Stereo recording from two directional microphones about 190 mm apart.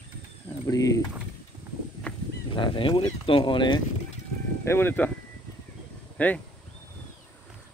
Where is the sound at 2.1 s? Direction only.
5° left (ahead or behind).